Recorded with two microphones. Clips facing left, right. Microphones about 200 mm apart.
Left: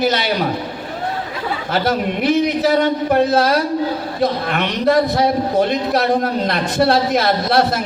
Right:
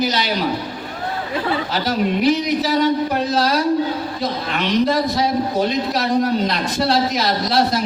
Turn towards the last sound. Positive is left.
turn(degrees=55)  # may be behind; listen again after turning